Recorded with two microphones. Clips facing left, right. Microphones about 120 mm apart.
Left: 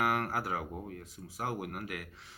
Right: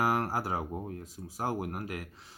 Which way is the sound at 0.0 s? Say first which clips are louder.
Right 2 dB; 35° right (ahead or behind).